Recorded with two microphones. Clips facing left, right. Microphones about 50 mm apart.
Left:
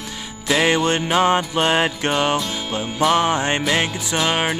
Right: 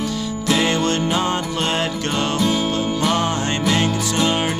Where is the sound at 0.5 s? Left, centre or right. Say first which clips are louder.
Left 2 dB; left.